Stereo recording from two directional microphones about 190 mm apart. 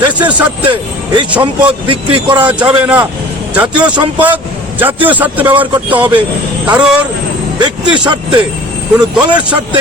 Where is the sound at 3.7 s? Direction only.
25° right (ahead or behind).